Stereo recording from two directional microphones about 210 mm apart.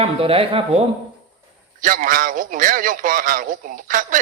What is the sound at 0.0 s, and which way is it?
Speech, 25° right (ahead or behind).